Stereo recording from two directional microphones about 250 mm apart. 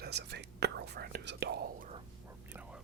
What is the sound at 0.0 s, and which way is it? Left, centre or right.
Speech, right.